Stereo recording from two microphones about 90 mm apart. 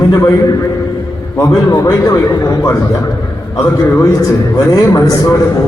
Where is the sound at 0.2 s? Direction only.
35° left (ahead or behind).